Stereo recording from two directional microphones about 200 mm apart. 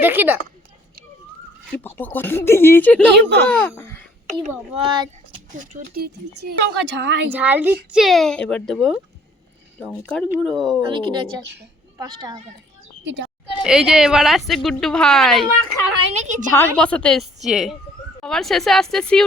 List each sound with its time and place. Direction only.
0.0 s a child's voice: 10° right (ahead or behind)
1.8 s speech: 10° left (ahead or behind)
3.2 s speech: 60° right (ahead or behind)
3.8 s a sound: 10° left (ahead or behind)
4.7 s speech: 25° right (ahead or behind)
5.5 s speech: 45° right (ahead or behind); by 7.3 s 60° right (ahead or behind)
7.3 s a child's voice: 10° right (ahead or behind)
10.8 s speech: 25° right (ahead or behind)
13.6 s a woman's voice: 5° right (ahead or behind)
16.1 s a sound: 35° right (ahead or behind)
16.5 s a woman's voice: 10° left (ahead or behind)